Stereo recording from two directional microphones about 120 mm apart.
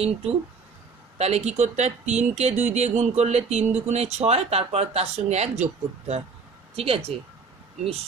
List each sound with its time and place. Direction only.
0.0 s speech: 55° right (ahead or behind)
6.7 s speech: 55° right (ahead or behind)